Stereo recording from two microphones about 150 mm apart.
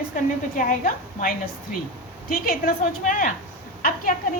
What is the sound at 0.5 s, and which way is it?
Speech, 70° left (ahead or behind).